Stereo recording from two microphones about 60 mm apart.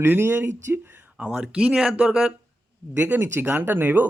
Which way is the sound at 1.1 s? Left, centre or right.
Centre.